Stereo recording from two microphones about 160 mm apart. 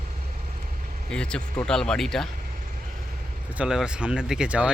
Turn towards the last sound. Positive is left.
turn(degrees=-5)  # may be behind; listen again after turning